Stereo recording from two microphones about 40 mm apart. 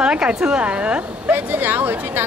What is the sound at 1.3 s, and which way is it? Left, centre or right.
Speech, right.